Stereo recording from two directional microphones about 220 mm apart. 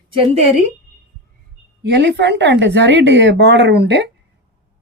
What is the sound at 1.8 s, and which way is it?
Speech, 50° right (ahead or behind).